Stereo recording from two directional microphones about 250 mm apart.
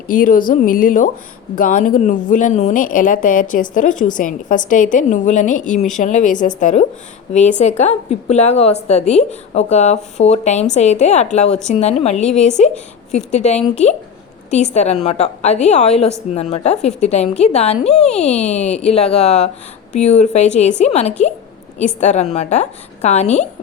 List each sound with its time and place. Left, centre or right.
0.1 s a woman's voice: left
12.2 s a woman's voice: centre
12.5 s a woman's voice: left